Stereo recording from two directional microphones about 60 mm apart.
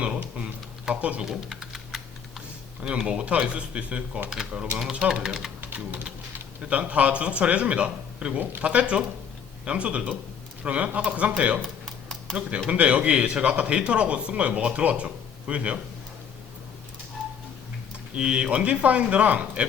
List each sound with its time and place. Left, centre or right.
0.2 s a sound: right
1.2 s typing: centre
2.8 s speech: centre
5.7 s speech: right
11.6 s tick-tock: centre
12.6 s speech: centre
18.1 s speech: centre